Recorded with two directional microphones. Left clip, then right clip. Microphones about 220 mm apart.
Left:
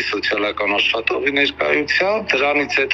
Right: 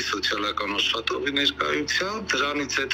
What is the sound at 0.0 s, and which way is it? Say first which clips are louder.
Speech: left 6 dB; 50° left (ahead or behind).